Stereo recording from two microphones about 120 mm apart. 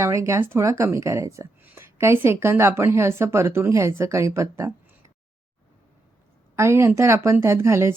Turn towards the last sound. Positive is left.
turn(degrees=-20)  # may be behind; listen again after turning